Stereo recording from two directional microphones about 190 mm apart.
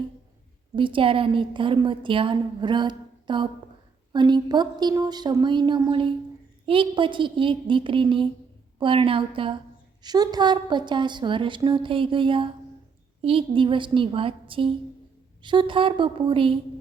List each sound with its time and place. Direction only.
0.8 s a woman's voice: 25° right (ahead or behind)